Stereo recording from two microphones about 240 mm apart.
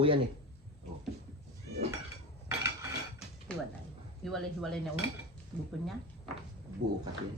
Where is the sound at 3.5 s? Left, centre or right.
Centre.